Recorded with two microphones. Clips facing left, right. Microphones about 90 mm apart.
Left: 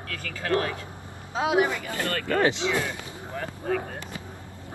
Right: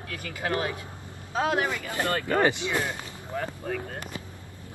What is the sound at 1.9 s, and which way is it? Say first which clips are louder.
Speech: right 1 dB; 20° right (ahead or behind).